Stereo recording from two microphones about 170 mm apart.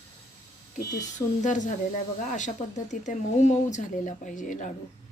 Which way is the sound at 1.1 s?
45° left (ahead or behind).